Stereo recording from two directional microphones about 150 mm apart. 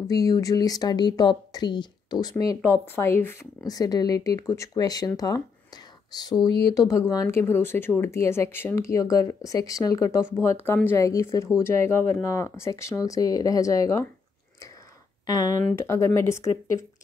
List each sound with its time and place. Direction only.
0.0 s speech: 25° left (ahead or behind)
15.2 s speech: 25° left (ahead or behind)